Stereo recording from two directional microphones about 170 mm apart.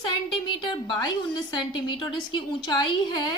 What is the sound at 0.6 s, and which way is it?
A woman's voice, 25° left (ahead or behind).